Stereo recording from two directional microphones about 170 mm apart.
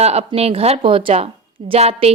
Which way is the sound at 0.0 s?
40° right (ahead or behind).